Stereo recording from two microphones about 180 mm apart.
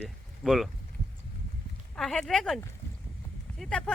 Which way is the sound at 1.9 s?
Centre (ahead or behind).